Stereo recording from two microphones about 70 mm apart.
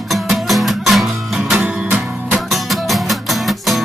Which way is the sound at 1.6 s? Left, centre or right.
Centre.